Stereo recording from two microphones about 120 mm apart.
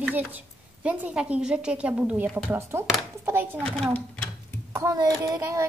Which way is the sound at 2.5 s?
20° right (ahead or behind).